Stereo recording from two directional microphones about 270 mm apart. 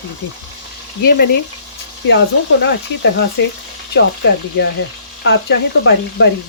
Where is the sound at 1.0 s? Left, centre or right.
Left.